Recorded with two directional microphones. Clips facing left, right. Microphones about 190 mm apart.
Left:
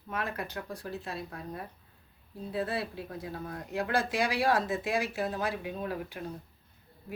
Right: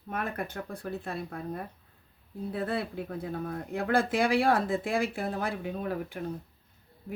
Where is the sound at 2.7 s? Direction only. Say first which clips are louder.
Right 3 dB; 55° right (ahead or behind).